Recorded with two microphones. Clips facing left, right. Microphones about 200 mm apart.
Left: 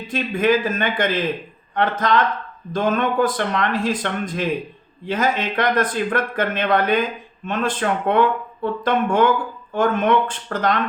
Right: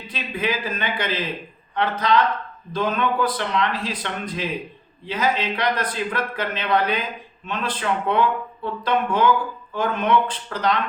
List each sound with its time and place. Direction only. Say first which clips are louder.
0.1 s speech: left 8 dB; 50° left (ahead or behind)